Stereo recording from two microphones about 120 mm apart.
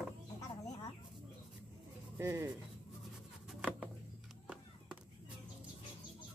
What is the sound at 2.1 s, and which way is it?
Speech, 25° right (ahead or behind).